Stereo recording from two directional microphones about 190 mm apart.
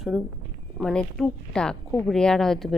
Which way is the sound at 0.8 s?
Centre (ahead or behind).